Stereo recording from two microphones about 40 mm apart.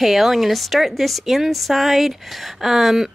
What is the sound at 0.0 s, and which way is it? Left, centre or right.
Speech, centre.